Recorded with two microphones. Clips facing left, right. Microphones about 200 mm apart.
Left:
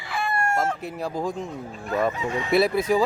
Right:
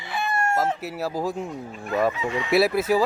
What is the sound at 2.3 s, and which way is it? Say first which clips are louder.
Fowl: even; 45° left (ahead or behind).